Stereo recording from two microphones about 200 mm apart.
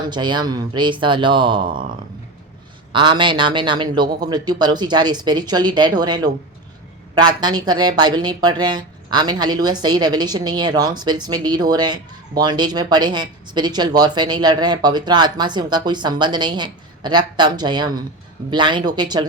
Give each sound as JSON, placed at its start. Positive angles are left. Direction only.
{"t": 0.1, "sound": "a woman's voice", "side_deg": -20}
{"t": 1.6, "sound": "speech", "side_deg": -45}
{"t": 2.9, "sound": "a woman's voice", "side_deg": -25}